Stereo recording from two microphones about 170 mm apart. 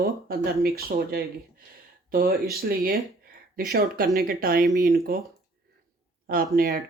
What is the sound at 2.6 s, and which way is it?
Speech, 65° right (ahead or behind).